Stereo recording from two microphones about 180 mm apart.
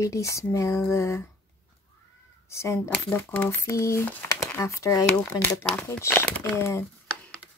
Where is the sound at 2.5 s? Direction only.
15° left (ahead or behind).